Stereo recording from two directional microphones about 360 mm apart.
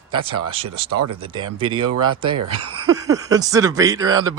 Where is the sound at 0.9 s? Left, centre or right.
Right.